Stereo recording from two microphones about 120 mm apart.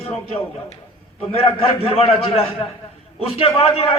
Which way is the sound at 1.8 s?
50° left (ahead or behind).